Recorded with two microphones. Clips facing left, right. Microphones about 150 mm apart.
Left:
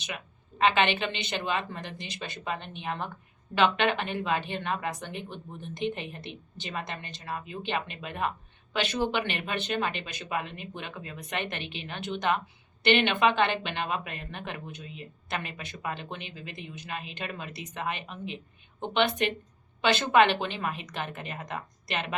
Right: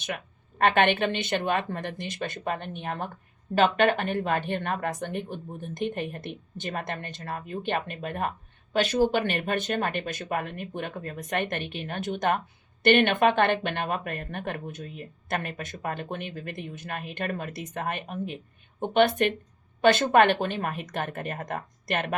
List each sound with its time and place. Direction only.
0.6 s speech: 55° right (ahead or behind)